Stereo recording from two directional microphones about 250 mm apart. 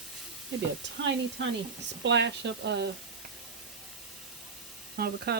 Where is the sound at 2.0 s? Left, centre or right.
Right.